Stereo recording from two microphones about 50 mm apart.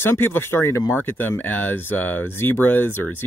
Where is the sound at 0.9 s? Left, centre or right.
Left.